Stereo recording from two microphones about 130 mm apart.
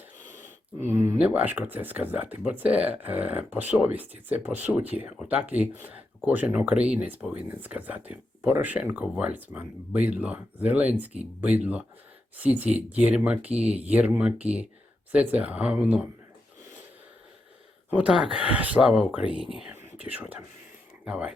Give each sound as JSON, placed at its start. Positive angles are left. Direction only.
{"t": 0.3, "sound": "wheeze", "side_deg": -80}
{"t": 0.8, "sound": "speech", "side_deg": -15}
{"t": 17.9, "sound": "speech", "side_deg": -5}